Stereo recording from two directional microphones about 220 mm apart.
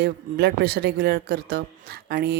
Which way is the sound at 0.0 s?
50° right (ahead or behind).